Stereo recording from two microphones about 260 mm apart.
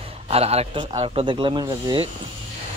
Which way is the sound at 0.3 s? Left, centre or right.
Right.